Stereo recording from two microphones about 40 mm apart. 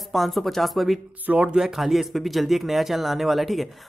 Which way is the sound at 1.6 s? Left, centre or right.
Centre.